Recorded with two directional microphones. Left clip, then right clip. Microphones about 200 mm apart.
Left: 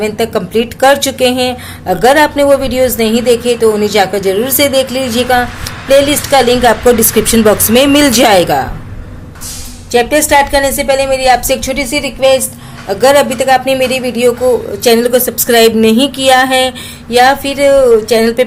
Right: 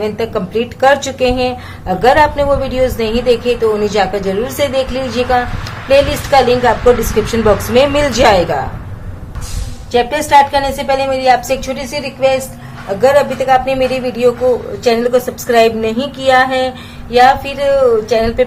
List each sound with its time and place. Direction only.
0.0 s speech: 40° left (ahead or behind)
9.9 s speech: 35° left (ahead or behind)